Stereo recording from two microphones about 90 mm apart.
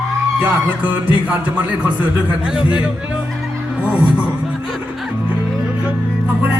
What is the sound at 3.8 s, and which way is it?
Speech, 15° right (ahead or behind).